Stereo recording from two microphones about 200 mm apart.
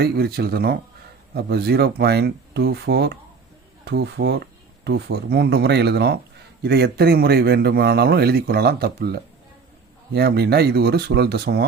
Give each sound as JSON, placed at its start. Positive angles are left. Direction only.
{"t": 0.0, "sound": "a man's voice", "side_deg": -50}